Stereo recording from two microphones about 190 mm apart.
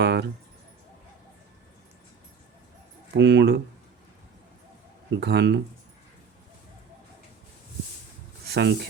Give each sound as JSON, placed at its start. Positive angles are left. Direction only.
{"t": 0.0, "sound": "a sound", "side_deg": -60}
{"t": 3.1, "sound": "speech", "side_deg": -65}
{"t": 5.1, "sound": "speech", "side_deg": -60}
{"t": 8.4, "sound": "speech", "side_deg": -60}